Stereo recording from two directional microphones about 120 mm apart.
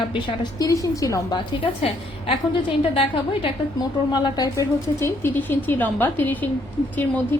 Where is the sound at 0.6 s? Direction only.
25° left (ahead or behind).